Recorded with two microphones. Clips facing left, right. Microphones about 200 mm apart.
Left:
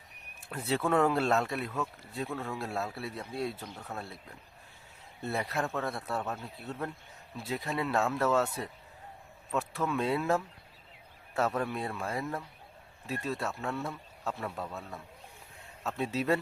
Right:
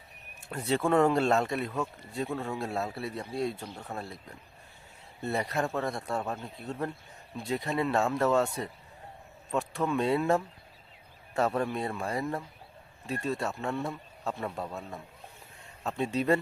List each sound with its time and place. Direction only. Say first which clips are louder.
0.4 s speech: right 3 dB; centre (ahead or behind)
3.9 s a man's voice: right 2 dB; 15° right (ahead or behind)
5.2 s speech: right 3 dB; centre (ahead or behind)
14.5 s a man's voice: right 2 dB; 15° right (ahead or behind)
15.9 s speech: right 3 dB; centre (ahead or behind)